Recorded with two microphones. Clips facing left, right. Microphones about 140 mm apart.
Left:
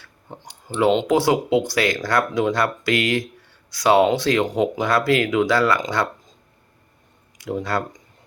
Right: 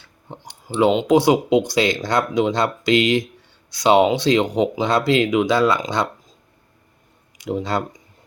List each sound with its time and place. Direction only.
0.7 s speech: 10° right (ahead or behind)
7.3 s speech: 20° right (ahead or behind)